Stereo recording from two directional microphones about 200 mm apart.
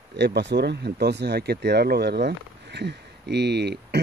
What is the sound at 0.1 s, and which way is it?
Speech, 55° right (ahead or behind).